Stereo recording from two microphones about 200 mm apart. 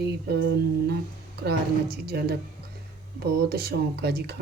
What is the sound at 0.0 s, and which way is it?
Music, 55° right (ahead or behind).